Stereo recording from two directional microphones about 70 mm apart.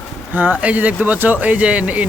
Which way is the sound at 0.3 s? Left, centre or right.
Right.